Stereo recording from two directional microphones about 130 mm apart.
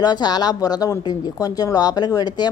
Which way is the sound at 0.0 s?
30° left (ahead or behind).